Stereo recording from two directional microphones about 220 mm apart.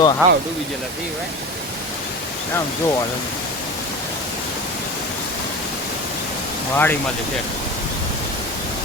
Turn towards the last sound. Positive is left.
turn(degrees=10)  # may be behind; listen again after turning